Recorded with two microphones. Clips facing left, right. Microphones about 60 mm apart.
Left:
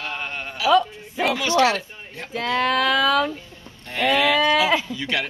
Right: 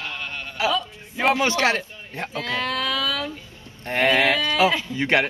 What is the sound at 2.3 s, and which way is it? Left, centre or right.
Speech, left.